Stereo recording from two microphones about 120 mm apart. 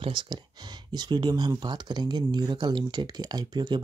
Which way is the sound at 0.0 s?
40° right (ahead or behind).